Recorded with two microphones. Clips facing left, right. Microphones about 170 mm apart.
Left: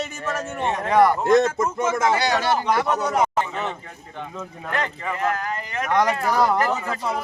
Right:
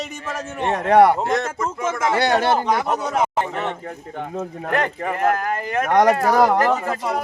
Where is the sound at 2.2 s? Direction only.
55° right (ahead or behind).